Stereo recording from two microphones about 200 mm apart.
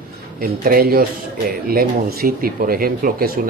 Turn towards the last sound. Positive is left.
turn(degrees=-45)  # may be behind; listen again after turning